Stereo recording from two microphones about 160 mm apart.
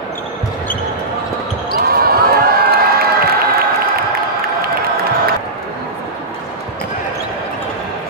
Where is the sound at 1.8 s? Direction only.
70° right (ahead or behind).